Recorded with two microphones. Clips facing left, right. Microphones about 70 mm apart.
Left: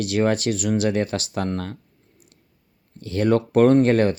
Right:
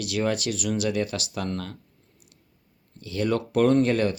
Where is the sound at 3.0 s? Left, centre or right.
Left.